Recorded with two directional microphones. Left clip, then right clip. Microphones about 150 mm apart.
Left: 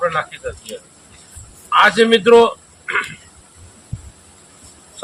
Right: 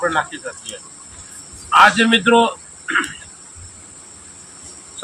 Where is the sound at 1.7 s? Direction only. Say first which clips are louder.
Even; 25° left (ahead or behind).